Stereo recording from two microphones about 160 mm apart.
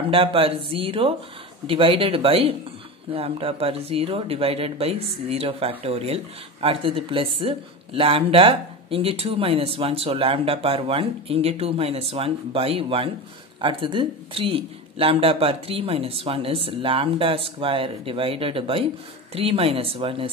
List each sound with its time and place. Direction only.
0.1 s speech: 35° right (ahead or behind)